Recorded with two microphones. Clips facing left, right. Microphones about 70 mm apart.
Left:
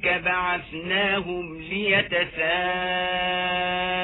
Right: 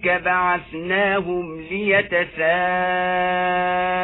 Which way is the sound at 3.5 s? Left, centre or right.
Right.